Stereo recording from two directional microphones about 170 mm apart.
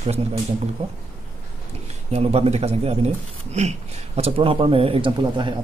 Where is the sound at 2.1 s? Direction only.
35° right (ahead or behind).